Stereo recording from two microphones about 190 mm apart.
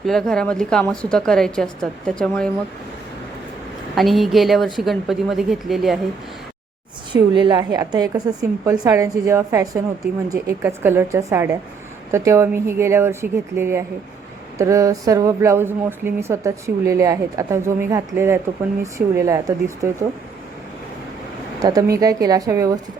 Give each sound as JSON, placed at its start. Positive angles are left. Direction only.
{"t": 0.0, "sound": "a woman's voice", "side_deg": 0}
{"t": 3.9, "sound": "a woman's voice", "side_deg": 0}
{"t": 7.1, "sound": "a woman's voice", "side_deg": -25}
{"t": 21.6, "sound": "a woman's voice", "side_deg": -20}